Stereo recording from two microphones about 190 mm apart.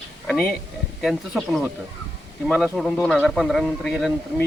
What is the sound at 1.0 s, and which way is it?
Speech, centre (ahead or behind).